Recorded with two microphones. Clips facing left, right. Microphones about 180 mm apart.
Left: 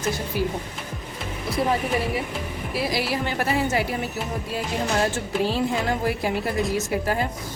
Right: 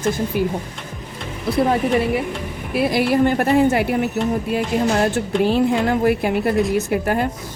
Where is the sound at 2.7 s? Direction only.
55° right (ahead or behind).